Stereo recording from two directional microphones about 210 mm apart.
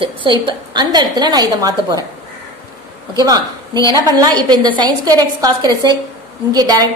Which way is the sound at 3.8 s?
15° left (ahead or behind).